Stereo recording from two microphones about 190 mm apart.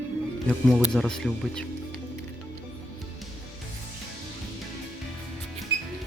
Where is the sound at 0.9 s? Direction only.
5° left (ahead or behind).